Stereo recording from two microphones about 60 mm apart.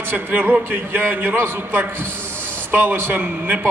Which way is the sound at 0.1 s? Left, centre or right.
Right.